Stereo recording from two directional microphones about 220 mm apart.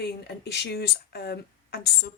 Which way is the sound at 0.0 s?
50° left (ahead or behind).